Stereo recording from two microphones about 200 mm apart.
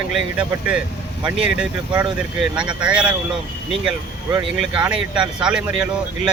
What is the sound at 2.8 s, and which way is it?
Speech, 5° right (ahead or behind).